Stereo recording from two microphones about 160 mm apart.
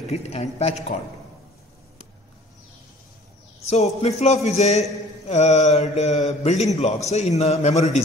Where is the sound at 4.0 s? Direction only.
45° left (ahead or behind).